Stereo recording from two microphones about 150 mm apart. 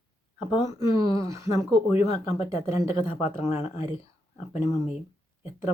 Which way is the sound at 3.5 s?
15° right (ahead or behind).